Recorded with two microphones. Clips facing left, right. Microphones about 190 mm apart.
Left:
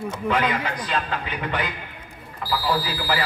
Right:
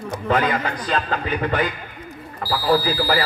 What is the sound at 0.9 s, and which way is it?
Speech, 40° right (ahead or behind).